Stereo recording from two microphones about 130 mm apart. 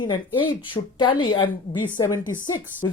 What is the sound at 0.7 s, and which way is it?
A woman's voice, 40° left (ahead or behind).